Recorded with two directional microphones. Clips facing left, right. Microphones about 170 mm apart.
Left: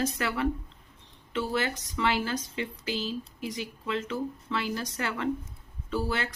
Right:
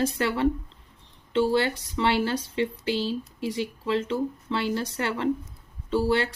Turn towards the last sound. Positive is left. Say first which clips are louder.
# right 7 dB
turn(degrees=-30)  # may be behind; listen again after turning